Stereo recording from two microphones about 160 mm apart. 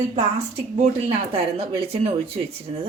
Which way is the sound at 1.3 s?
35° right (ahead or behind).